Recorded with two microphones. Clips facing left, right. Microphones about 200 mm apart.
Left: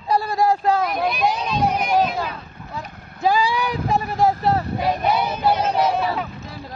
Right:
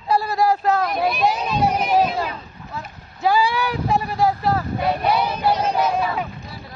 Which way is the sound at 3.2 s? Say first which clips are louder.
Even; 15° left (ahead or behind).